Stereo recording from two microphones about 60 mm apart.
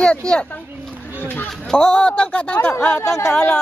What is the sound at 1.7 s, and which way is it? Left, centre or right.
A child's voice, centre.